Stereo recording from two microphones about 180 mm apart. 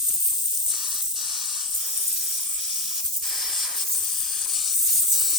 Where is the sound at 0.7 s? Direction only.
Centre (ahead or behind).